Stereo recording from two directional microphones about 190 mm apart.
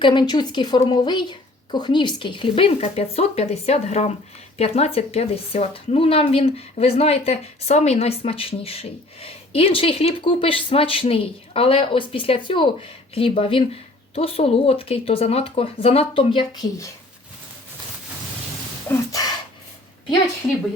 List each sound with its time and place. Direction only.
0.0 s a woman's voice: 25° left (ahead or behind)
18.9 s gasp: 20° left (ahead or behind)